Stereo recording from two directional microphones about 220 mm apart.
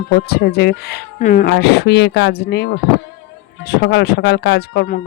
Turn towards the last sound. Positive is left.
turn(degrees=50)  # may be behind; listen again after turning